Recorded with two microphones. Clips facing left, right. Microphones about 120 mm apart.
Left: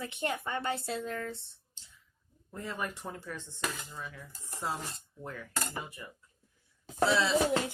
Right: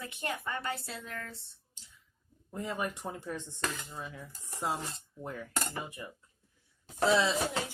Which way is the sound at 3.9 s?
20° right (ahead or behind).